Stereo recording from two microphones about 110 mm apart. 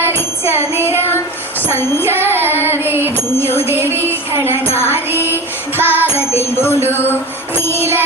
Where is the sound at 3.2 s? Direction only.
20° left (ahead or behind).